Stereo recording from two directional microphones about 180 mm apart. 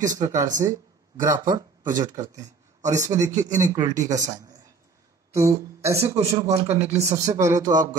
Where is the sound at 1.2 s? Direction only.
20° right (ahead or behind).